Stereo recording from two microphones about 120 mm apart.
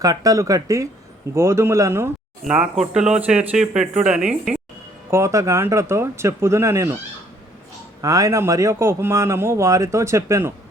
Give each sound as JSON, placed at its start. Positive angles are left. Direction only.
{"t": 0.0, "sound": "a man's voice", "side_deg": -30}
{"t": 2.4, "sound": "speech", "side_deg": -5}
{"t": 5.1, "sound": "a man's voice", "side_deg": -25}
{"t": 8.0, "sound": "a man's voice", "side_deg": -30}